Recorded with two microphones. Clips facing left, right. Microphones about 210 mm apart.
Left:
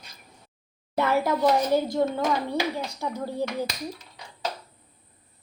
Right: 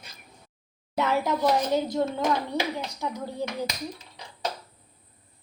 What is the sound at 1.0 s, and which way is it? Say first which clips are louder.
Speech: left 2 dB; 10° left (ahead or behind).